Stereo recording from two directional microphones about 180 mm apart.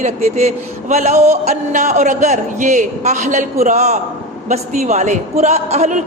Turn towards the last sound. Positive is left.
turn(degrees=-40)  # may be behind; listen again after turning